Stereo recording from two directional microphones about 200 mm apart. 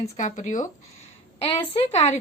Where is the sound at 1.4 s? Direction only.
30° left (ahead or behind).